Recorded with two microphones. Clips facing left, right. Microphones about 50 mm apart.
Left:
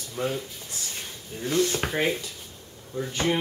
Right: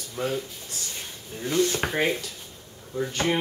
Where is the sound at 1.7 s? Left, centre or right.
Centre.